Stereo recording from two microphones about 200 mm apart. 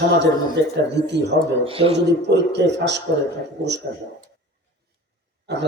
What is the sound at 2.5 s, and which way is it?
Speech, 60° right (ahead or behind).